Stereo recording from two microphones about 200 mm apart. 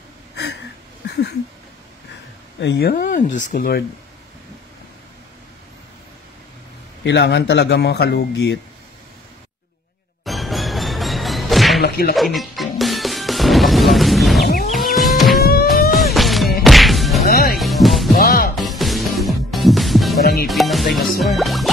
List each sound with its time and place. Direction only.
0.4 s a sound: 55° left (ahead or behind)
2.6 s speech: 55° left (ahead or behind)
7.1 s a man's voice: 60° left (ahead or behind)
10.2 s music: centre (ahead or behind)
11.8 s music: 50° left (ahead or behind)
12.2 s music: centre (ahead or behind)
16.6 s whip: centre (ahead or behind)
17.2 s music: 50° left (ahead or behind)
17.6 s music: centre (ahead or behind)
18.1 s music: 50° left (ahead or behind)
18.6 s music: centre (ahead or behind)
20.2 s music: 50° left (ahead or behind)
20.4 s music: centre (ahead or behind)